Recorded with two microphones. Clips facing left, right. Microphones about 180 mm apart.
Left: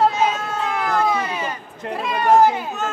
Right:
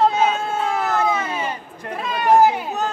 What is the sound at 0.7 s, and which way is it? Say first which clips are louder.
Cat: left 1 dB; 25° right (ahead or behind).